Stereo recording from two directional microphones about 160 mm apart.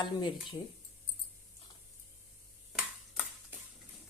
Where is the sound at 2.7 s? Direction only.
10° right (ahead or behind).